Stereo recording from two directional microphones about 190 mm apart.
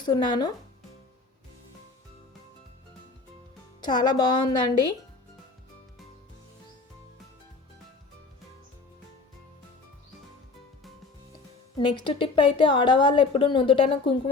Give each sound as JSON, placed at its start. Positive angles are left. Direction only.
{"t": 0.0, "sound": "a woman's voice", "side_deg": 20}
{"t": 3.8, "sound": "a woman's voice", "side_deg": 20}
{"t": 11.8, "sound": "a woman's voice", "side_deg": 25}